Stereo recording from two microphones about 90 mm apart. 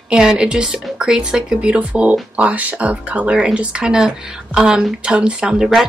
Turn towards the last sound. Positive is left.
turn(degrees=-5)  # may be behind; listen again after turning